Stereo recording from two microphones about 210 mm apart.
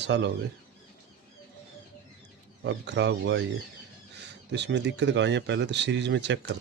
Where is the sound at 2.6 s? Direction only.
55° right (ahead or behind).